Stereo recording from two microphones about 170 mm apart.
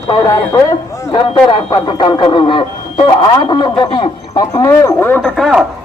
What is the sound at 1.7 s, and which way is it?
Speech, 25° left (ahead or behind).